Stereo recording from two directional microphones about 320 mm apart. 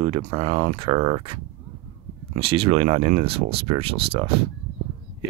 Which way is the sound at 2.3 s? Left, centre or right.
Centre.